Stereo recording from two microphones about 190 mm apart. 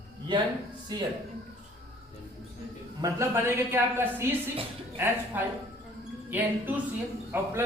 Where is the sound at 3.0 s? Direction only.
15° right (ahead or behind).